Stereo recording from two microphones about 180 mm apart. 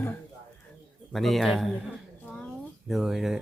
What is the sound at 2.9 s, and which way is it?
Speech, 5° right (ahead or behind).